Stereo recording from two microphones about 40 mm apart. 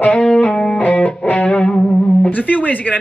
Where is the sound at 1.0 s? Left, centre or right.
Left.